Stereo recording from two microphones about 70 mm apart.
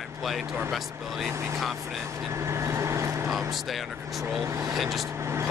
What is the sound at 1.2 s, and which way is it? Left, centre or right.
Speech, right.